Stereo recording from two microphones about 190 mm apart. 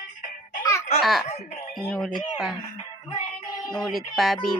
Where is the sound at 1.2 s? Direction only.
35° left (ahead or behind).